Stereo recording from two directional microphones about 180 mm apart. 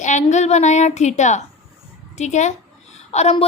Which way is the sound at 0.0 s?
40° left (ahead or behind).